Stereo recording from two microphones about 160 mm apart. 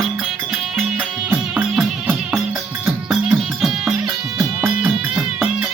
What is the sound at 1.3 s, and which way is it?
Music, 10° right (ahead or behind).